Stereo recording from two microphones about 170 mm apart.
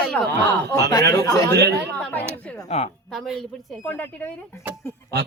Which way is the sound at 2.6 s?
35° left (ahead or behind).